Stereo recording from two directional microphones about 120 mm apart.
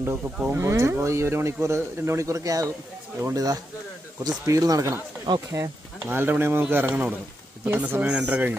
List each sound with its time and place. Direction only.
0.5 s speech: 25° right (ahead or behind)